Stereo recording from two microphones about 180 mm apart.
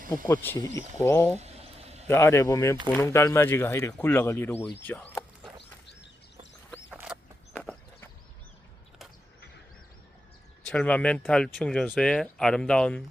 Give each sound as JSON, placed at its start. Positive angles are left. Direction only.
{"t": 0.3, "sound": "speech", "side_deg": 10}
{"t": 1.4, "sound": "a sound", "side_deg": -35}
{"t": 2.0, "sound": "speech", "side_deg": 15}
{"t": 6.9, "sound": "a sound", "side_deg": -5}
{"t": 7.5, "sound": "horse", "side_deg": 5}
{"t": 10.7, "sound": "speech", "side_deg": 5}